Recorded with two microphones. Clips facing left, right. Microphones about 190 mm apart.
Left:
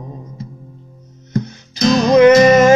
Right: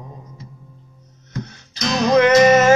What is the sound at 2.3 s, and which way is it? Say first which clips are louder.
Music: left 3 dB; 35° left (ahead or behind).